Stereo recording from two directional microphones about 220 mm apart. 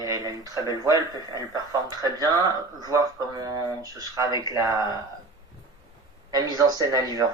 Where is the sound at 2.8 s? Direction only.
15° right (ahead or behind).